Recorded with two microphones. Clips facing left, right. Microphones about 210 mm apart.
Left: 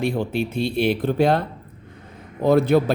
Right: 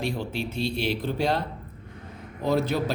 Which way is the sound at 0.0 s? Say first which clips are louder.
Left 7 dB; 55° left (ahead or behind).